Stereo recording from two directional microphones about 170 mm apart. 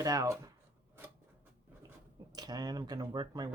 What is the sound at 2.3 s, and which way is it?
Speech, 20° right (ahead or behind).